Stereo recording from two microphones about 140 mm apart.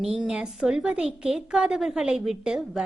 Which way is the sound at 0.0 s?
5° right (ahead or behind).